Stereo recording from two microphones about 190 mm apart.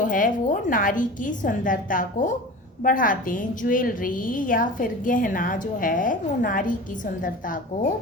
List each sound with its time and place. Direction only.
0.0 s a woman's voice: 45° left (ahead or behind)